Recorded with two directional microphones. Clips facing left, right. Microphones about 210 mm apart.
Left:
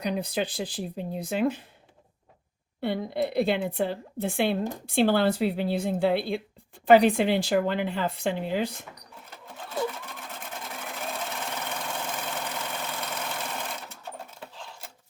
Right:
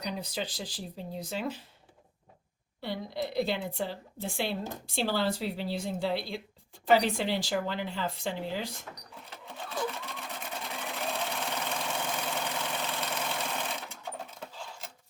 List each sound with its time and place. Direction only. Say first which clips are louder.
0.0 s speech: left 7 dB; 55° left (ahead or behind)
2.8 s speech: left 7 dB; 55° left (ahead or behind)
9.3 s sewing machine: left 3 dB; centre (ahead or behind)